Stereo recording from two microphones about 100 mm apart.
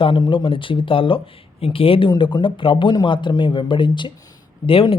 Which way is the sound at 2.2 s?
55° left (ahead or behind).